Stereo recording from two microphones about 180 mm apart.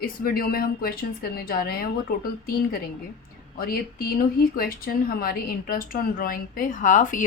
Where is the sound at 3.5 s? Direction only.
55° left (ahead or behind).